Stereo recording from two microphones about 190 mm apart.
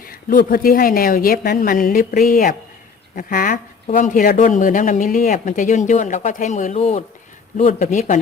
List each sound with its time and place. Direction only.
0.0 s speech: 50° left (ahead or behind)